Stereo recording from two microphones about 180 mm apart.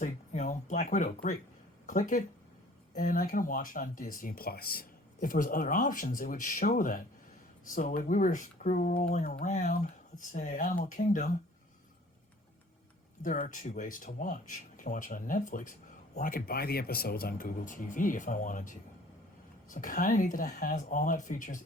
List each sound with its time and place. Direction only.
0.0 s speech: 45° left (ahead or behind)
13.2 s speech: 50° left (ahead or behind)